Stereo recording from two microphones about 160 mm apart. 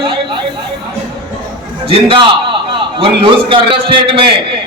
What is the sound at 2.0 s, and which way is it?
A man's voice, 30° right (ahead or behind).